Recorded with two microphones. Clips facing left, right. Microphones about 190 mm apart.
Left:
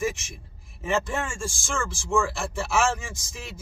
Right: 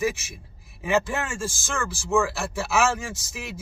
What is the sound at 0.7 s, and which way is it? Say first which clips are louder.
A man's voice: right 2 dB; 5° right (ahead or behind).